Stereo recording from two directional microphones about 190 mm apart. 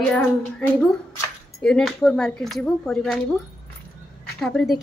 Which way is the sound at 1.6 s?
5° left (ahead or behind).